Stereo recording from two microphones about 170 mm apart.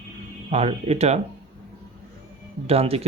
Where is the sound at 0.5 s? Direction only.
35° right (ahead or behind).